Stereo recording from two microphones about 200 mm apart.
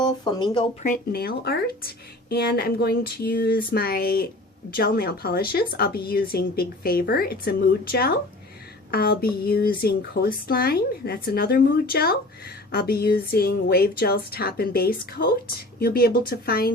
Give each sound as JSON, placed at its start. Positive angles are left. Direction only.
{"t": 0.0, "sound": "speech", "side_deg": 20}
{"t": 0.8, "sound": "a woman's voice", "side_deg": 45}